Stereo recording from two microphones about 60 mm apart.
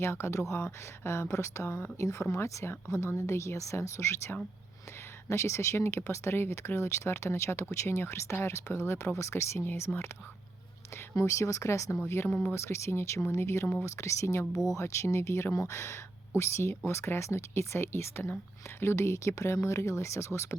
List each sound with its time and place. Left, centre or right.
0.0 s speech: left
11.2 s speech: left
12.0 s speech: left
14.5 s speech: centre
14.8 s speech: left